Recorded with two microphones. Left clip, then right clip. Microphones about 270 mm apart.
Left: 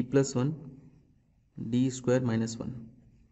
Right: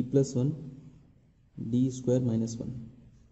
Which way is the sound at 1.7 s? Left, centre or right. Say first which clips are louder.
Left 1 dB; left.